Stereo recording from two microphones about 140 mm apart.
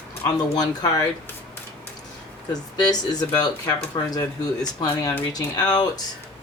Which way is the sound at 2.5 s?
30° left (ahead or behind).